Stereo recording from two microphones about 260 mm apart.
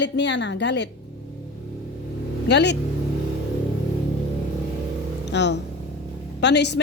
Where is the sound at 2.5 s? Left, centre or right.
Left.